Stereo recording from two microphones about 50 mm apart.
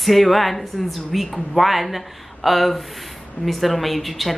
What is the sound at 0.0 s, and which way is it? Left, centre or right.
Speech, centre.